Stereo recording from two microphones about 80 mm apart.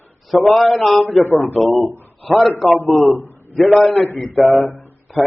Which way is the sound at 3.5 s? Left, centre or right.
Centre.